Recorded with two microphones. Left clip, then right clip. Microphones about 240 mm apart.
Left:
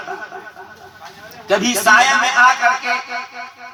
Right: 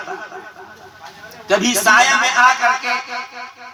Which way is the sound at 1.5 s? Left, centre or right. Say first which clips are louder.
Left 1 dB; right.